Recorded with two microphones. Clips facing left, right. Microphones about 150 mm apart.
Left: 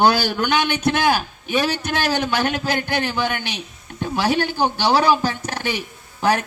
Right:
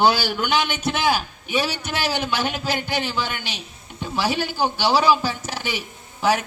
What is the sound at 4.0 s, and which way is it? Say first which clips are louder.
Speech: left 4 dB; 55° left (ahead or behind).